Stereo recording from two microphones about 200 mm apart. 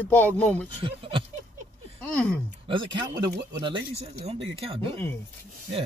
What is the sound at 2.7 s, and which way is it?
Speech, 25° right (ahead or behind).